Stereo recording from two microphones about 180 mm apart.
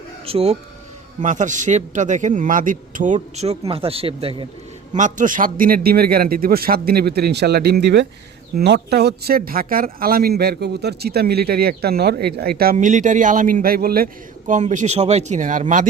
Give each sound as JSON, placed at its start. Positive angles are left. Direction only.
{"t": 0.3, "sound": "speech", "side_deg": -35}
{"t": 4.9, "sound": "speech", "side_deg": -45}
{"t": 12.7, "sound": "speech", "side_deg": -45}